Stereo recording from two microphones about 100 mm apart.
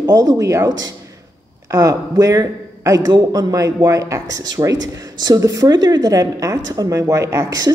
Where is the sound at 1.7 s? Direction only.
35° right (ahead or behind).